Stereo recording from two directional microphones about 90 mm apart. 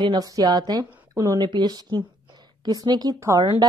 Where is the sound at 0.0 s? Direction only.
50° right (ahead or behind).